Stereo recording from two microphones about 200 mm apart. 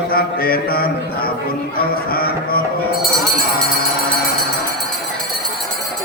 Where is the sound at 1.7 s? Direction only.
50° left (ahead or behind).